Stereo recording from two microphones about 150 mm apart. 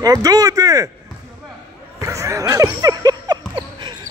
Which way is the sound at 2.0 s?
20° right (ahead or behind).